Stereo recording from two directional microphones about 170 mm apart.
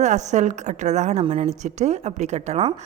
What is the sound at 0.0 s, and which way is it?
A woman's voice, 45° right (ahead or behind).